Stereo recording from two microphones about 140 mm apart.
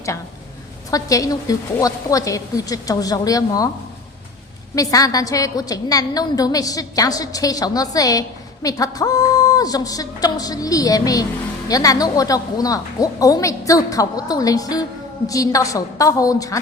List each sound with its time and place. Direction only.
0.9 s a woman's voice: 25° left (ahead or behind)
4.7 s a woman's voice: 25° left (ahead or behind)